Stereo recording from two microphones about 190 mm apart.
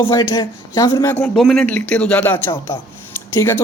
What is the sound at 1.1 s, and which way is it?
Speech, 10° left (ahead or behind).